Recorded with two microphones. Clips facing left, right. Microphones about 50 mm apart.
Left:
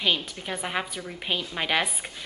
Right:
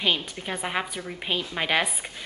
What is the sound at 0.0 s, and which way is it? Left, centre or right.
A woman's voice, centre.